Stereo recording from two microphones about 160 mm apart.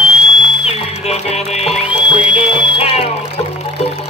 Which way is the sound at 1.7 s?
5° right (ahead or behind).